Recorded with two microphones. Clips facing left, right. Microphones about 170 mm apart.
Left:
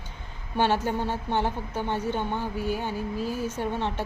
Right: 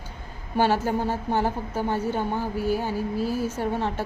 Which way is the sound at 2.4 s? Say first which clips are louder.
Right 4 dB; 40° right (ahead or behind).